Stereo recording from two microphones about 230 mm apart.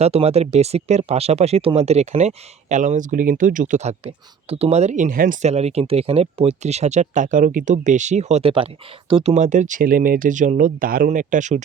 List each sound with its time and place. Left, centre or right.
0.0 s speech: right